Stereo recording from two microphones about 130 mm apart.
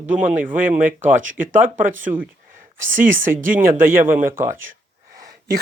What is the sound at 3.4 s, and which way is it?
Speech, 90° right.